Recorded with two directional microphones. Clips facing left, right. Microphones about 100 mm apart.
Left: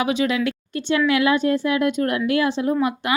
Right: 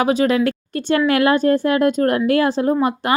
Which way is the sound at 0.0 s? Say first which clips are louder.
Right 5 dB; 40° right (ahead or behind).